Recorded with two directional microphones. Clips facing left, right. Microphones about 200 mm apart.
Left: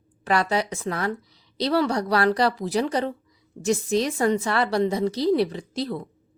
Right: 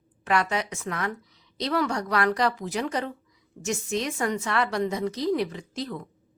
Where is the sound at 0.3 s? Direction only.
35° left (ahead or behind).